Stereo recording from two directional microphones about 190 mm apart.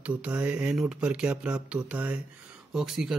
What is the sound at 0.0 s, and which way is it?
Speech, 5° right (ahead or behind).